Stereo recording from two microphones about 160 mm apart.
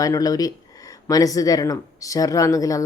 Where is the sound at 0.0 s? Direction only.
20° left (ahead or behind).